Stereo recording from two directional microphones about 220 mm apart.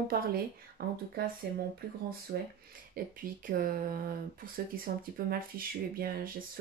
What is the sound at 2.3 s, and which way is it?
Speech, 40° right (ahead or behind).